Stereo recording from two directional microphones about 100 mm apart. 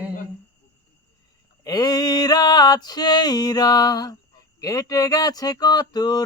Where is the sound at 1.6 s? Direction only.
40° left (ahead or behind).